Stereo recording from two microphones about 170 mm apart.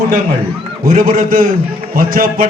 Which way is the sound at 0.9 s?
55° right (ahead or behind).